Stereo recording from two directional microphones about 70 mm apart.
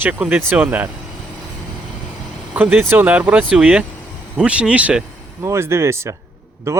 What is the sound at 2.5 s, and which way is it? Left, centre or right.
Speech, right.